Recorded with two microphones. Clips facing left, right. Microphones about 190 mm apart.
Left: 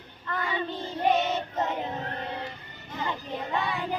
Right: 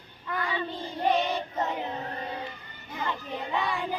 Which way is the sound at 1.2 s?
20° left (ahead or behind).